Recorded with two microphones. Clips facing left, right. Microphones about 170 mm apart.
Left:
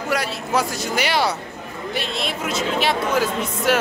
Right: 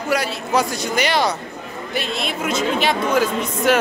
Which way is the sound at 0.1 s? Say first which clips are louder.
Right 3 dB; centre (ahead or behind).